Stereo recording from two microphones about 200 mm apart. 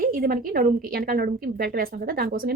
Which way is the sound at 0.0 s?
45° right (ahead or behind).